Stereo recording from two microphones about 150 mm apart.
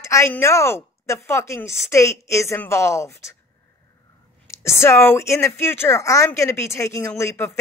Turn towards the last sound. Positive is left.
turn(degrees=20)  # may be behind; listen again after turning